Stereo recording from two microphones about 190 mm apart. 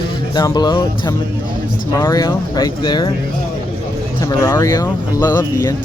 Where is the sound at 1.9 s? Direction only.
15° left (ahead or behind).